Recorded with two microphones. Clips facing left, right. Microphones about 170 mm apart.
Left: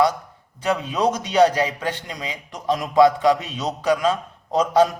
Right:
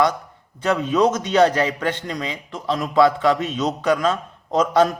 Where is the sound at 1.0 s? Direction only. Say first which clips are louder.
Left 1 dB; 10° left (ahead or behind).